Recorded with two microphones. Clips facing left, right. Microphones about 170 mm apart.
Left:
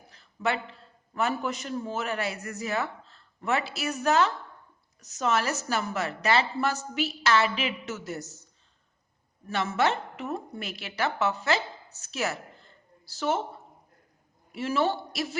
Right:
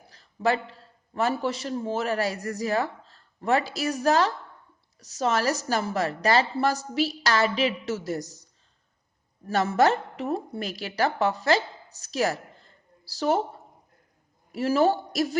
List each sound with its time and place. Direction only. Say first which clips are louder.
0.1 s a man's voice: right 4 dB; 35° right (ahead or behind)
9.5 s a woman's voice: right 5 dB; 40° right (ahead or behind)
14.5 s a woman's voice: right 5 dB; 40° right (ahead or behind)